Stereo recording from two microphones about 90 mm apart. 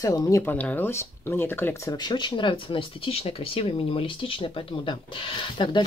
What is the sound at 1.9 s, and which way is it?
Speech, 50° left (ahead or behind).